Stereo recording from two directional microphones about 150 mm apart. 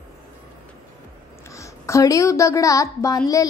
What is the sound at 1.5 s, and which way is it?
A child's voice, 20° left (ahead or behind).